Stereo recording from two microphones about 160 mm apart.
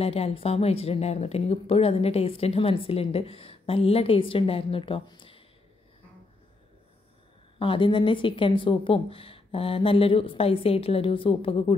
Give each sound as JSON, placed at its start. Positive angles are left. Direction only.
{"t": 0.0, "sound": "a woman's voice", "side_deg": 40}
{"t": 7.5, "sound": "a woman's voice", "side_deg": 30}